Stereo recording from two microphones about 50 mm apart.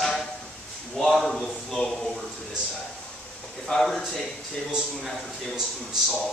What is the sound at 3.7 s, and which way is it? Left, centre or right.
Speech, centre.